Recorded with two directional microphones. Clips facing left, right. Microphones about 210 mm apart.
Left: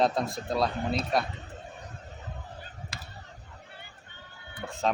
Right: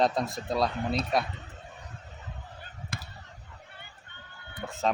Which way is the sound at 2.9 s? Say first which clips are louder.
Right 8 dB; 55° right (ahead or behind).